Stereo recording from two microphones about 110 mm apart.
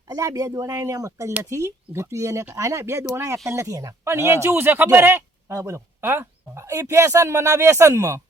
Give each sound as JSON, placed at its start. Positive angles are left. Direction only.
{"t": 0.1, "sound": "speech", "side_deg": -30}